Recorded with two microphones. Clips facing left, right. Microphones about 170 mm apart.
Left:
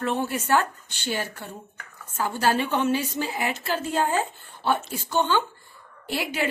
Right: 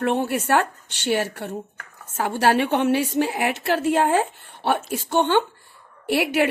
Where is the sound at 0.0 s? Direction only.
60° right (ahead or behind).